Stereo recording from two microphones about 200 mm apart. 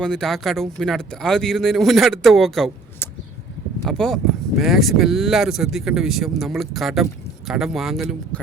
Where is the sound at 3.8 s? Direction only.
Centre (ahead or behind).